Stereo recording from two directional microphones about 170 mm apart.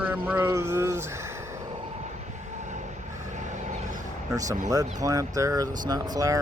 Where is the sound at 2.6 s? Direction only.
45° right (ahead or behind).